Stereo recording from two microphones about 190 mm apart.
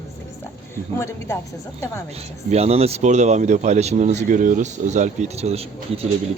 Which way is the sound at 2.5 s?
35° right (ahead or behind).